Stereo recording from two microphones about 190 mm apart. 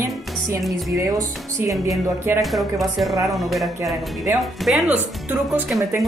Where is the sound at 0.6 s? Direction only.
Centre (ahead or behind).